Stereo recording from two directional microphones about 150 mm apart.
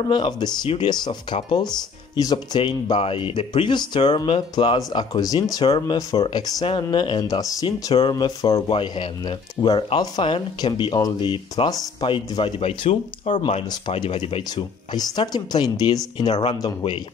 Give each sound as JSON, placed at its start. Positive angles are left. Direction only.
{"t": 0.1, "sound": "speech", "side_deg": 30}
{"t": 7.9, "sound": "speech", "side_deg": 35}
{"t": 8.6, "sound": "speech", "side_deg": 35}
{"t": 12.4, "sound": "speech", "side_deg": 40}